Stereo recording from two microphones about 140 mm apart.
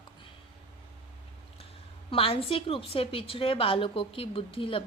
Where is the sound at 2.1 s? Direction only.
40° left (ahead or behind).